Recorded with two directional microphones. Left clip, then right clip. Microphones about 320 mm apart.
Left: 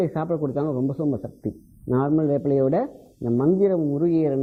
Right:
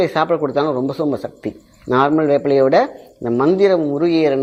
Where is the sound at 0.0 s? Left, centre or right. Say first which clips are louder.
Right 9 dB; centre.